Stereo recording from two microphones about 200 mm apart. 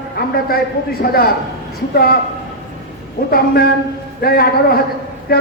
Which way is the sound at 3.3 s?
50° left (ahead or behind).